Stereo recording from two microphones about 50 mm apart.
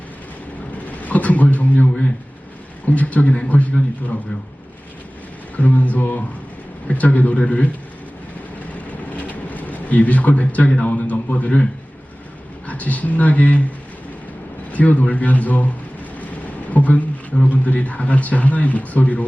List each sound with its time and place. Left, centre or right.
0.7 s a man's voice: left
5.5 s a man's voice: left
8.9 s speech: left
12.6 s speech: left
14.7 s a man's voice: left